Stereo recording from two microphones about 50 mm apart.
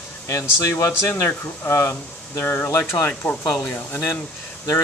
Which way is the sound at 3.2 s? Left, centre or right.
Left.